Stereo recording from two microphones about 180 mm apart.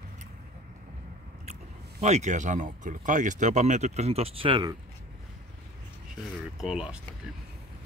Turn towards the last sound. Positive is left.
turn(degrees=-5)  # may be behind; listen again after turning